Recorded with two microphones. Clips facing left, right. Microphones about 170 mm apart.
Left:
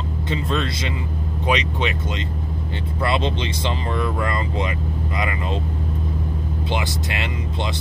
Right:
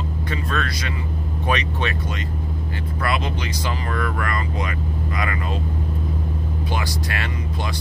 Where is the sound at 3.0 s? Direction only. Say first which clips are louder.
Left 3 dB; 25° left (ahead or behind).